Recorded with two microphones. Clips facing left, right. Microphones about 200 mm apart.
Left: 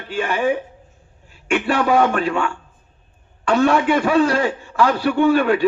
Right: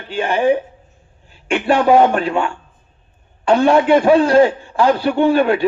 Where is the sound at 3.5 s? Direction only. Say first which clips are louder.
Right 4 dB; 35° right (ahead or behind).